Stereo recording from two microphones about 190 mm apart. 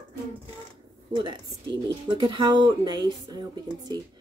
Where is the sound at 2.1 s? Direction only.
25° right (ahead or behind).